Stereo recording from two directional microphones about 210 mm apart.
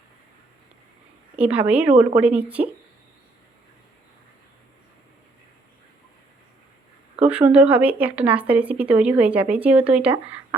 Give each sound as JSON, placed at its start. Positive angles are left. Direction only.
{"t": 1.4, "sound": "speech", "side_deg": -5}
{"t": 7.3, "sound": "speech", "side_deg": -5}